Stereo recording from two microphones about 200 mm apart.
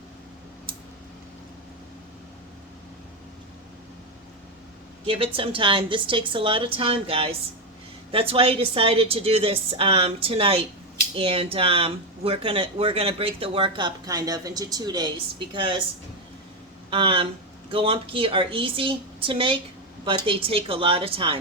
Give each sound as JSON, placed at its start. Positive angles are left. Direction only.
{"t": 5.0, "sound": "speech", "side_deg": -25}
{"t": 16.9, "sound": "speech", "side_deg": -25}